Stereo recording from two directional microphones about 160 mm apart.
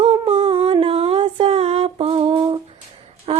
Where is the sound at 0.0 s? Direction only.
35° right (ahead or behind).